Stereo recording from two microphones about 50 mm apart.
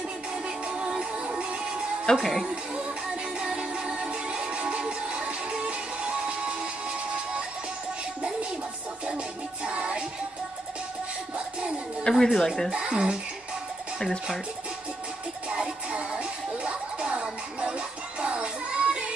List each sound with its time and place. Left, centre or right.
0.7 s music: right
2.1 s speech: centre
3.3 s music: centre
9.7 s music: centre
12.0 s speech: centre
12.7 s speech: centre
15.5 s music: centre